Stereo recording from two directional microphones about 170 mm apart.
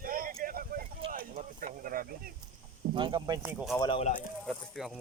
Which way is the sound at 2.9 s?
25° right (ahead or behind).